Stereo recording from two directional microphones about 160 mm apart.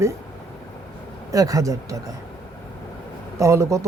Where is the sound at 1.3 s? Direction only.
20° right (ahead or behind).